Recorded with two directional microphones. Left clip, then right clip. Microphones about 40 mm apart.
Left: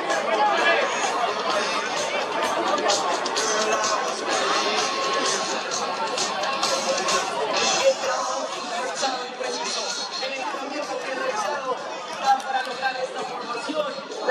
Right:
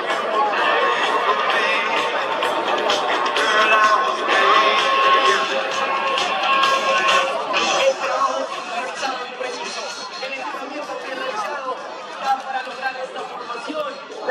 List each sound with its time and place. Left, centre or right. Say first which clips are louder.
0.1 s chatter: right 1 dB; right
2.2 s music: right 3 dB; right